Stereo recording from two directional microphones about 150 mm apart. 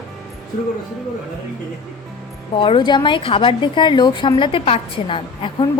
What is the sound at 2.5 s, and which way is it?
A woman's voice, 35° left (ahead or behind).